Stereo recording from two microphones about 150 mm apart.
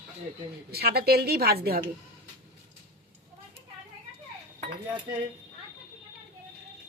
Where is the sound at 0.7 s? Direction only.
90° right.